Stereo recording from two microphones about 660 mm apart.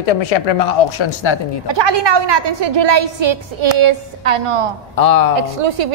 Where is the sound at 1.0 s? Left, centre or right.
Left.